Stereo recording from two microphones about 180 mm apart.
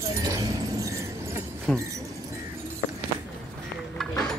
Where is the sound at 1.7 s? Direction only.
Centre (ahead or behind).